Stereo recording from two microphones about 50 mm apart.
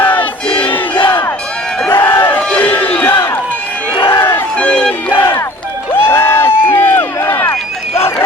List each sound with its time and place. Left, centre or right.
0.0 s battle cry: left
1.9 s a sound: left
2.4 s crowd: left
2.6 s crowd: left
4.1 s crowd: left
4.5 s crowd: left
5.1 s a sound: left
5.9 s crowd: left
7.3 s run: left